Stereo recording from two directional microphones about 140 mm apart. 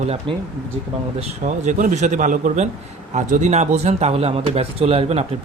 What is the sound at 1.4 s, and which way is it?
Speech, 60° right (ahead or behind).